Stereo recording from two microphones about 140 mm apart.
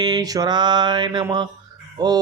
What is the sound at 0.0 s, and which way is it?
Mantra, 30° right (ahead or behind).